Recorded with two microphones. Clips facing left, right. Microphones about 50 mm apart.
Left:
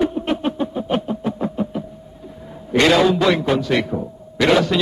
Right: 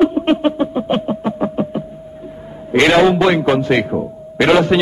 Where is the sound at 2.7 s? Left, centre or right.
Right.